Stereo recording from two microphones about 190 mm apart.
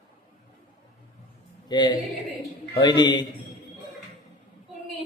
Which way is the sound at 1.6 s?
25° left (ahead or behind).